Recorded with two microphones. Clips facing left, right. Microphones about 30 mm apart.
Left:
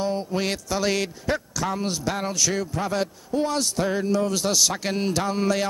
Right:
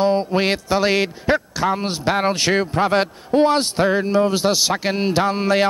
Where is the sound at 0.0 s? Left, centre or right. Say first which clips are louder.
Right 8 dB; right.